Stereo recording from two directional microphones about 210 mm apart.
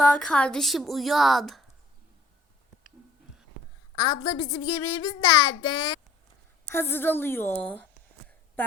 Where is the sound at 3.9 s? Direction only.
20° left (ahead or behind).